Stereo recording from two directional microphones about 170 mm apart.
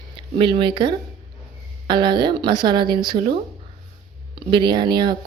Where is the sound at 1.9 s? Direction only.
25° right (ahead or behind).